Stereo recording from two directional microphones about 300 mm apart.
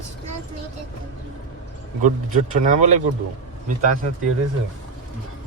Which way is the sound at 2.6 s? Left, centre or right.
Right.